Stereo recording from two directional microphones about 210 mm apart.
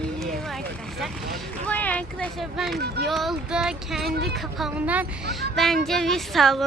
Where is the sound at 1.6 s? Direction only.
5° left (ahead or behind).